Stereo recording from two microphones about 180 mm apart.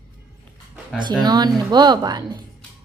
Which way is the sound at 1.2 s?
25° right (ahead or behind).